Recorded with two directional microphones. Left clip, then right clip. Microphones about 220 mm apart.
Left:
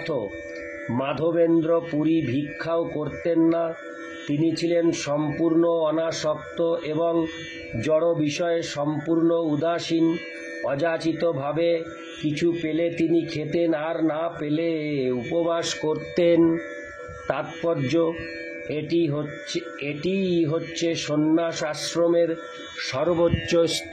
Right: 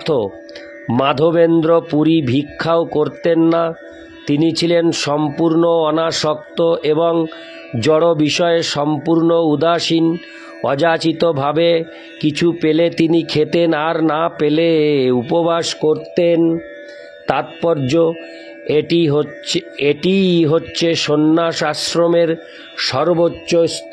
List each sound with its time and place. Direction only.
0.9 s speech: 50° right (ahead or behind)
16.2 s speech: 30° right (ahead or behind)
17.3 s speech: 40° right (ahead or behind)